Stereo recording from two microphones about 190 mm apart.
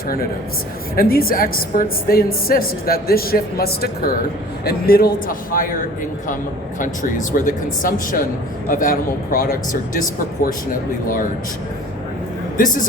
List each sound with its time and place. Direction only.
0.9 s a woman's voice: 50° left (ahead or behind)
6.7 s a woman's voice: 45° left (ahead or behind)
12.5 s a woman's voice: 45° left (ahead or behind)